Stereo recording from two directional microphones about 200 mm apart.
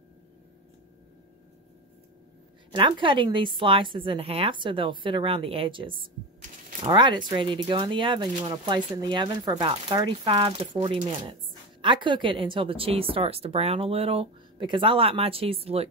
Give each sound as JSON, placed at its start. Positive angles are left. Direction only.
{"t": 2.7, "sound": "speech", "side_deg": -25}